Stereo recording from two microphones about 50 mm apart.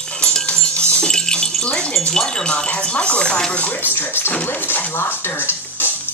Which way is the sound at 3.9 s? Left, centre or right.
Left.